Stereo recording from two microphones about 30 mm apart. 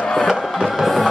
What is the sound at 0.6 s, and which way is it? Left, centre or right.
Music, centre.